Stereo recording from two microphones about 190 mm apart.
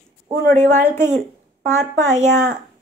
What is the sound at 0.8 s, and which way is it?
Speech, 40° right (ahead or behind).